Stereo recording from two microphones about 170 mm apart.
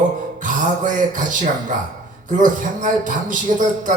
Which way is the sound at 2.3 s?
50° right (ahead or behind).